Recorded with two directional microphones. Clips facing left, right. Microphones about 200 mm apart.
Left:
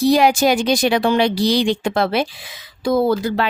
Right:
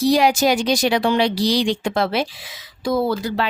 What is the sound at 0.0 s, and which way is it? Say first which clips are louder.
Speech: left 2 dB; 55° left (ahead or behind).